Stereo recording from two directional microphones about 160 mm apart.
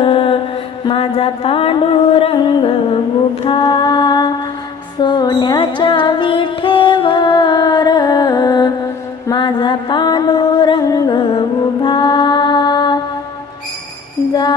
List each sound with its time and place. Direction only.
0.0 s mantra: 35° left (ahead or behind)
0.8 s a sound: 35° left (ahead or behind)
4.9 s music: 25° left (ahead or behind)